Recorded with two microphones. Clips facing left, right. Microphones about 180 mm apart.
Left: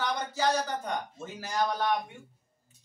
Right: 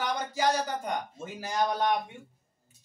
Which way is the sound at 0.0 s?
10° right (ahead or behind).